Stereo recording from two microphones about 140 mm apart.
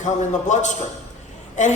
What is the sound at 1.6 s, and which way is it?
Music, 60° left (ahead or behind).